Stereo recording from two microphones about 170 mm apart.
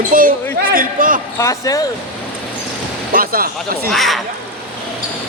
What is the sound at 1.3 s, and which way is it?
Speech, 20° left (ahead or behind).